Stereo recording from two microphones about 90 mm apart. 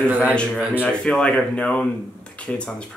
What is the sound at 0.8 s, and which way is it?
Speech, 10° left (ahead or behind).